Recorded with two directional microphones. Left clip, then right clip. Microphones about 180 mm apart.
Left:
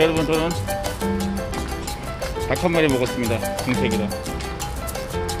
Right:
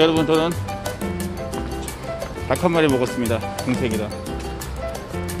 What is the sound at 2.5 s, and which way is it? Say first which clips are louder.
Speech: right 2 dB; 15° right (ahead or behind).